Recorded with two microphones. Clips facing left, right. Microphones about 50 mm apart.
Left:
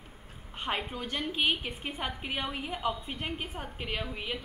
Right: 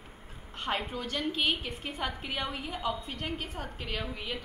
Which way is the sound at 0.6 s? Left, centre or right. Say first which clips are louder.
Right 1 dB; centre.